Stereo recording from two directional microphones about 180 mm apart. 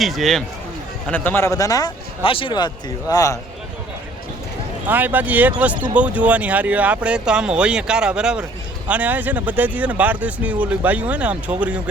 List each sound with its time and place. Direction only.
0.0 s a man's voice: centre (ahead or behind); by 3.3 s 20° left (ahead or behind)
4.9 s speech: 10° right (ahead or behind)